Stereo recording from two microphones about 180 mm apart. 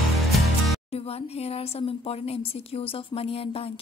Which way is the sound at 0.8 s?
35° left (ahead or behind).